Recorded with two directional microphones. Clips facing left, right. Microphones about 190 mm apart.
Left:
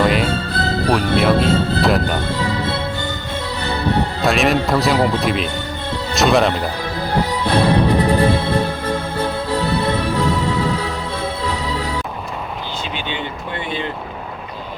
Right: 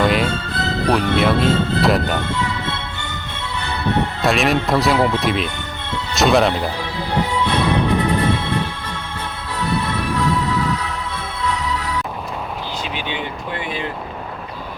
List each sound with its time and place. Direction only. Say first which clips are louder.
0.0 s music: left 1 dB; centre (ahead or behind)
0.3 s music: left 3 dB; 35° left (ahead or behind)
1.1 s speech: left 1 dB; centre (ahead or behind)
2.2 s music: left 3 dB; 35° left (ahead or behind)
4.2 s speech: left 1 dB; centre (ahead or behind)
4.9 s speech: even; 35° left (ahead or behind)
5.2 s speech: left 1 dB; centre (ahead or behind)
5.5 s music: left 4 dB; 35° left (ahead or behind)
6.1 s speech: even; centre (ahead or behind)
6.7 s music: left 2 dB; 40° left (ahead or behind)